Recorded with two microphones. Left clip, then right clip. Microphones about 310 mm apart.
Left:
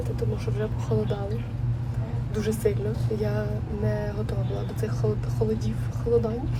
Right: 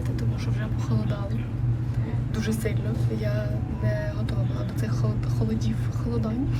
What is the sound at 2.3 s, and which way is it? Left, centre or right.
Speech, left.